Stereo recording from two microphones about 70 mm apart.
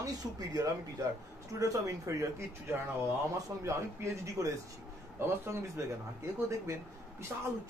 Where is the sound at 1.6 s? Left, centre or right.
Right.